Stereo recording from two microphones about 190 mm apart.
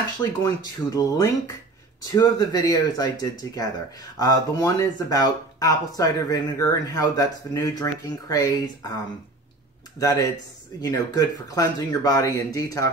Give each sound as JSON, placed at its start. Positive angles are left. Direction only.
{"t": 0.2, "sound": "speech", "side_deg": 20}
{"t": 9.9, "sound": "speech", "side_deg": 20}